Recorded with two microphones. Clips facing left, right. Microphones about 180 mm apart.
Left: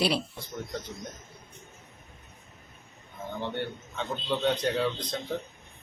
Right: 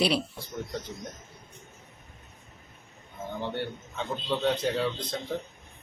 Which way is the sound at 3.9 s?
5° right (ahead or behind).